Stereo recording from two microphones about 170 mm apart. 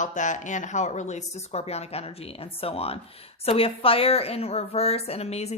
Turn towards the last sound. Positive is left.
turn(degrees=40)  # may be behind; listen again after turning